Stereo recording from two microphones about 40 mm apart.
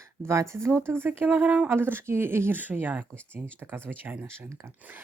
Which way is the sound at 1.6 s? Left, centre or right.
Right.